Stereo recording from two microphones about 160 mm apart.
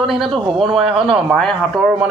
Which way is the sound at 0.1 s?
Centre (ahead or behind).